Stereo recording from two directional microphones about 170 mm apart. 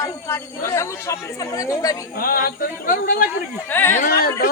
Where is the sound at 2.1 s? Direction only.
60° left (ahead or behind).